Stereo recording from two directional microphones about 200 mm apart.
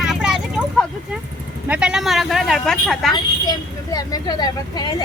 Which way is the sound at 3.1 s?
20° left (ahead or behind).